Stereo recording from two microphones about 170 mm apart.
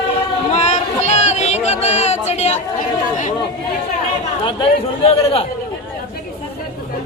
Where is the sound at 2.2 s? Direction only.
40° left (ahead or behind).